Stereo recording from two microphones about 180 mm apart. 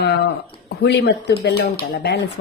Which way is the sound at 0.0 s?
65° left (ahead or behind).